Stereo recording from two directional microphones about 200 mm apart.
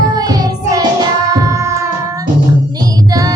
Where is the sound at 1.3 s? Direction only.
15° right (ahead or behind).